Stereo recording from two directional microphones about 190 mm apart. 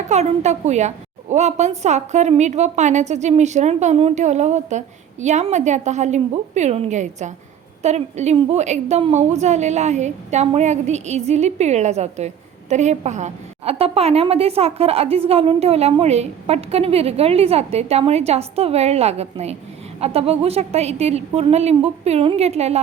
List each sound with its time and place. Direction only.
0.1 s a woman's voice: 35° right (ahead or behind)